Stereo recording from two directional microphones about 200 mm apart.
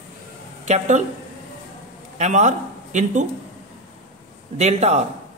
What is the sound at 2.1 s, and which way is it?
A man's voice, 35° right (ahead or behind).